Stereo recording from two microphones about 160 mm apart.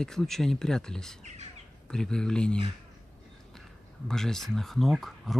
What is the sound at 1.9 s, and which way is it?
Speech, 5° left (ahead or behind).